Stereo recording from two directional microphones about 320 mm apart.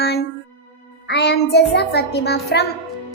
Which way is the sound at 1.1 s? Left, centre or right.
Left.